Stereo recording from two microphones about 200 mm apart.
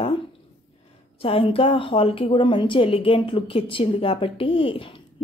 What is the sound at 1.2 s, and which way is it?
A woman's voice, 30° left (ahead or behind).